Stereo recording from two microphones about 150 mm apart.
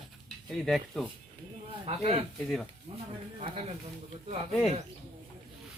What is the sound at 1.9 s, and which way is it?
Speech, 45° right (ahead or behind).